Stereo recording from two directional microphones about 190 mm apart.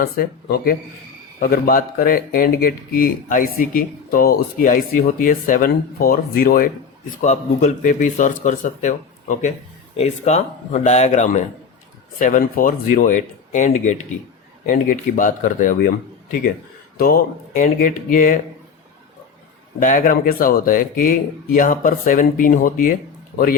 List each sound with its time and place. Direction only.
0.0 s speech: 55° left (ahead or behind)
17.0 s speech: 50° left (ahead or behind)
19.8 s speech: 45° left (ahead or behind)